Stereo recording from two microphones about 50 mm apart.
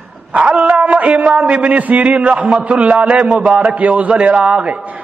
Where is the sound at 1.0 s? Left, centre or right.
Right.